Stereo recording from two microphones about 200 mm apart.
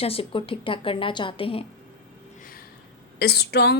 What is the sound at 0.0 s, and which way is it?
A woman's voice, 30° left (ahead or behind).